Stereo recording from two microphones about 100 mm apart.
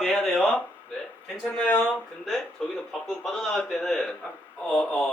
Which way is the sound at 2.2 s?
5° left (ahead or behind).